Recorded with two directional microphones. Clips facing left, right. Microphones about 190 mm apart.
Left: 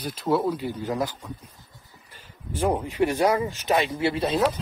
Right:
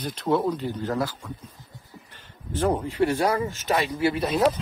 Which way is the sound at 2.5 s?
15° left (ahead or behind).